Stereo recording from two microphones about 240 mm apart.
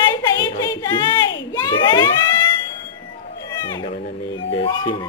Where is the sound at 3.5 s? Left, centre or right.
Centre.